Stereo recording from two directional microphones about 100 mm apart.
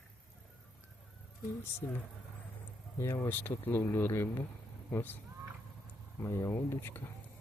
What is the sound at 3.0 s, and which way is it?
Speech, 25° left (ahead or behind).